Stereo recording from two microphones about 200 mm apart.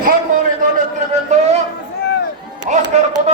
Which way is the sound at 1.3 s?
35° right (ahead or behind).